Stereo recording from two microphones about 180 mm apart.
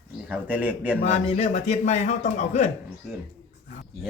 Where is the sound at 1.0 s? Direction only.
40° left (ahead or behind).